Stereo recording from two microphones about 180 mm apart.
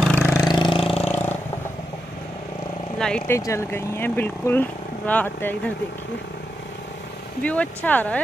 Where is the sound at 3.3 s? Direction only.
15° left (ahead or behind).